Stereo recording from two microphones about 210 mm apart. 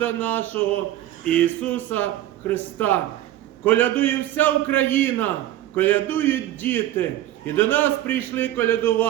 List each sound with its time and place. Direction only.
0.0 s a man's voice: 10° left (ahead or behind)